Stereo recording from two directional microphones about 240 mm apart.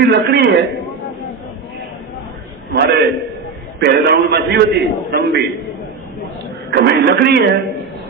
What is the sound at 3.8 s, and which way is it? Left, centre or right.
Speech, right.